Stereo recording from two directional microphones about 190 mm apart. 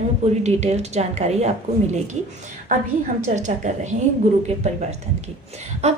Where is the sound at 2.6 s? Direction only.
40° right (ahead or behind).